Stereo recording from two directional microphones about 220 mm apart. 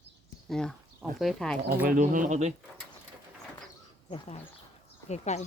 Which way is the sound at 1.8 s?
40° right (ahead or behind).